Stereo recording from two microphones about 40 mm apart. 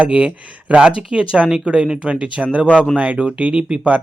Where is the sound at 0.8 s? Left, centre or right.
Right.